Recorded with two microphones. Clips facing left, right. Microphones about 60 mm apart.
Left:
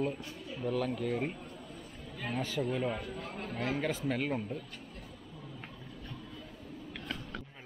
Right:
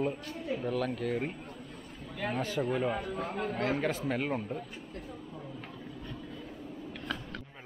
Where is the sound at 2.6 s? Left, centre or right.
Right.